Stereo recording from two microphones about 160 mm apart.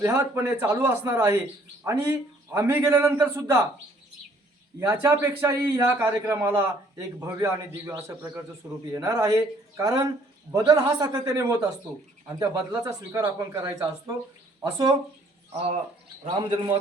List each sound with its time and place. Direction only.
0.0 s a man's voice: 15° right (ahead or behind)
4.8 s a man's voice: 15° right (ahead or behind)
15.5 s a man's voice: 40° right (ahead or behind)